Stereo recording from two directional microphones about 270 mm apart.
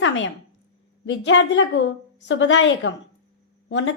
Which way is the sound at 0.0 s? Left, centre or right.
Left.